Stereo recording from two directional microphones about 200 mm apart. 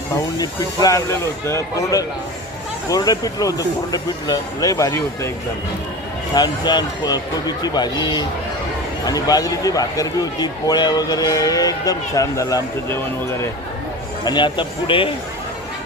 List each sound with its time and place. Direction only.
0.3 s speech: 15° left (ahead or behind)
6.3 s speech: 20° left (ahead or behind)